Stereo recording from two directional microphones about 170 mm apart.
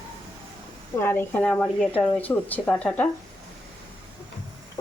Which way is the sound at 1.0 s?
10° left (ahead or behind).